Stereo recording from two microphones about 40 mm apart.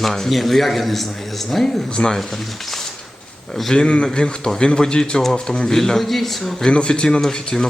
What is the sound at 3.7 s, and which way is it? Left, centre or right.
Speech, left.